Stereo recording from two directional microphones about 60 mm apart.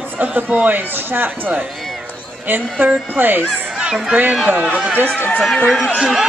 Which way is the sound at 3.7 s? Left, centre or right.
Centre.